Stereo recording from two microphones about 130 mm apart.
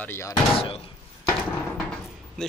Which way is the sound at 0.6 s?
45° left (ahead or behind).